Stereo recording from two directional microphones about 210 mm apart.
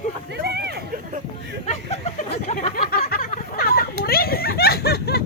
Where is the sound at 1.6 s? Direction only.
30° left (ahead or behind).